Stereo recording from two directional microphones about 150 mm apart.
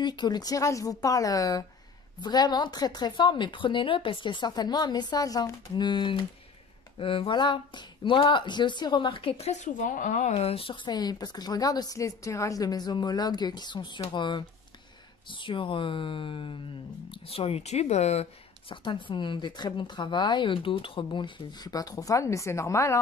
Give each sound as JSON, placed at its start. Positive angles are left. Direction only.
{"t": 0.0, "sound": "speech", "side_deg": 30}
{"t": 10.3, "sound": "speech", "side_deg": 40}
{"t": 18.9, "sound": "speech", "side_deg": 30}